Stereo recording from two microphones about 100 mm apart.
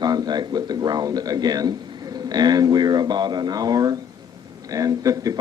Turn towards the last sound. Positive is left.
turn(degrees=-35)  # may be behind; listen again after turning